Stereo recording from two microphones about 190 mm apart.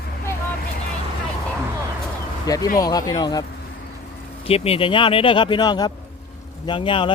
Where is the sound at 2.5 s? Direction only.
20° left (ahead or behind).